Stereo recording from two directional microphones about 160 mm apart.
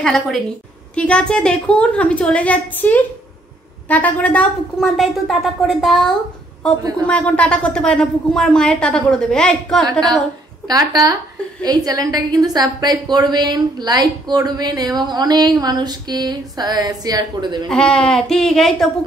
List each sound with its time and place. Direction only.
0.0 s a woman's voice: centre (ahead or behind)
10.7 s a woman's voice: 20° right (ahead or behind)
17.6 s a woman's voice: 5° left (ahead or behind)